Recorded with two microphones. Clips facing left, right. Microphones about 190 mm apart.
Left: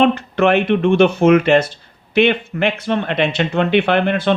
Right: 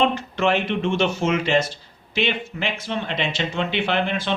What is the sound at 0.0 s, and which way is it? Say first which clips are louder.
Speech: left 6 dB; 60° left (ahead or behind).